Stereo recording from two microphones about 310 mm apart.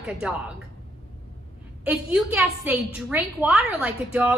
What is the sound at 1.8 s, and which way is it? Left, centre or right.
A woman's voice, centre.